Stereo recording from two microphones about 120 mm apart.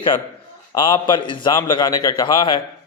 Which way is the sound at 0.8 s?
40° left (ahead or behind).